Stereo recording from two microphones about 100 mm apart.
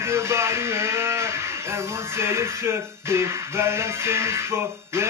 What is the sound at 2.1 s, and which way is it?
Music, 25° right (ahead or behind).